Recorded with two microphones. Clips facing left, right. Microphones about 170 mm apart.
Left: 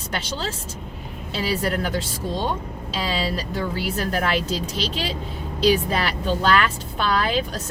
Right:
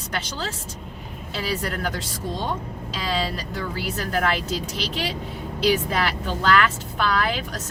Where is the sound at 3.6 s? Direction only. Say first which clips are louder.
Left 2 dB; 20° left (ahead or behind).